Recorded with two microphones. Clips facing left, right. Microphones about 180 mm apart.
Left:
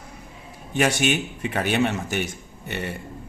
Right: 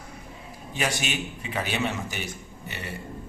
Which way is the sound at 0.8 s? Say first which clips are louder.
Left 7 dB; 60° left (ahead or behind).